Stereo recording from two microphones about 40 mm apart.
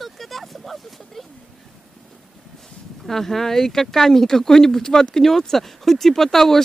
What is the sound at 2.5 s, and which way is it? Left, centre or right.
Speech, centre.